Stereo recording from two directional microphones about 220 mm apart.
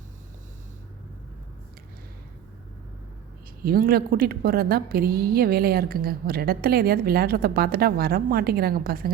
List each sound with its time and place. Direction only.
3.6 s a woman's voice: 40° right (ahead or behind)